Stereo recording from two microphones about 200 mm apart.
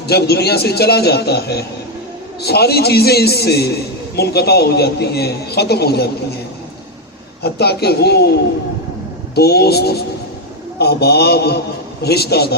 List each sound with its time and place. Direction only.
0.1 s a man's voice: 55° left (ahead or behind)
7.4 s a man's voice: 55° left (ahead or behind)
9.3 s a man's voice: 55° left (ahead or behind)